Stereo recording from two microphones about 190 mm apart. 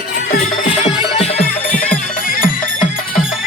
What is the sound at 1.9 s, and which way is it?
Music, 45° left (ahead or behind).